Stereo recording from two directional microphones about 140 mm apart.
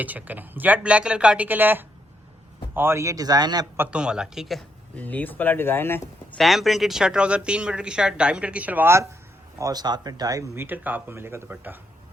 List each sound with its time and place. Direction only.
0.0 s speech: 10° right (ahead or behind); by 3.7 s 30° right (ahead or behind)
3.8 s a man's voice: 5° right (ahead or behind)
4.9 s speech: 10° left (ahead or behind)
6.4 s speech: centre (ahead or behind)